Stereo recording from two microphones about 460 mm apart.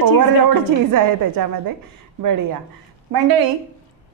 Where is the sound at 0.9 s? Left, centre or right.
Right.